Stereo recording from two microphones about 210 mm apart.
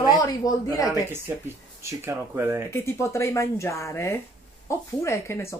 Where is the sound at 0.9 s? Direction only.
10° right (ahead or behind).